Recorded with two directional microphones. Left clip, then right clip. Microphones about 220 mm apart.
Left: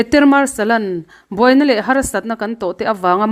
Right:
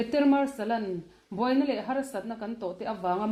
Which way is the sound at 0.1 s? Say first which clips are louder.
Left 12 dB; 45° left (ahead or behind).